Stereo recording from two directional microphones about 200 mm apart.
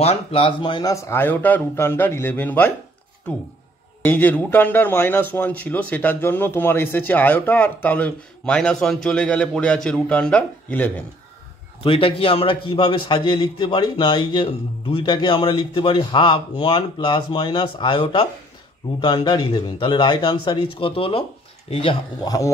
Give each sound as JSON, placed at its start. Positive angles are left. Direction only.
{"t": 0.0, "sound": "speech", "side_deg": 30}
{"t": 4.0, "sound": "speech", "side_deg": 10}
{"t": 11.8, "sound": "a man's voice", "side_deg": 25}